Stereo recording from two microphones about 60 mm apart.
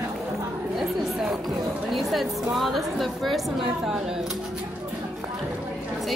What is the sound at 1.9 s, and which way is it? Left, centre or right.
A woman's voice, centre.